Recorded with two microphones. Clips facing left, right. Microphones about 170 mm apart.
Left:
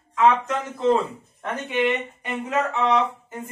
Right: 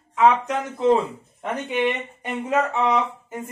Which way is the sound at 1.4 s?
15° right (ahead or behind).